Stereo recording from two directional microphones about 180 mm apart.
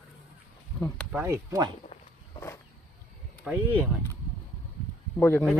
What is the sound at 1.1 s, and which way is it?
Speech, 15° right (ahead or behind).